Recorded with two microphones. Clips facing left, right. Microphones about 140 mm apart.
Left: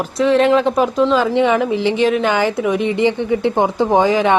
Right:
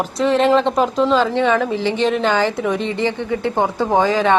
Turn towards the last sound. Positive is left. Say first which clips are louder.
# left 2 dB
turn(degrees=15)  # may be behind; listen again after turning